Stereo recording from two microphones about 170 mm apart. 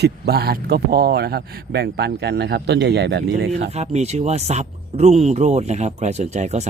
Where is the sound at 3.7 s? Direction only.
40° right (ahead or behind).